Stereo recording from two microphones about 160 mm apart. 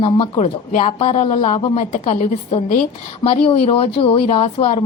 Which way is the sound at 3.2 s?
35° left (ahead or behind).